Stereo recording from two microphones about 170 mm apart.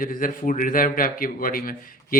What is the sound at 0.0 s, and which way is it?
A man's voice, 55° left (ahead or behind).